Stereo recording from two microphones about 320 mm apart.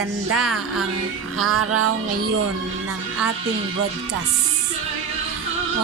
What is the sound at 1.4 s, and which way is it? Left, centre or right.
Speech, right.